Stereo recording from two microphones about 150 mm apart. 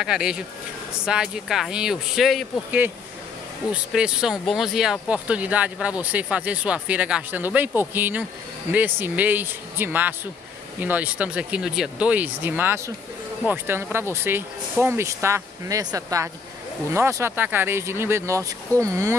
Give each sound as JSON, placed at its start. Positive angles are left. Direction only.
{"t": 0.0, "sound": "speech", "side_deg": -5}
{"t": 3.7, "sound": "speech", "side_deg": -5}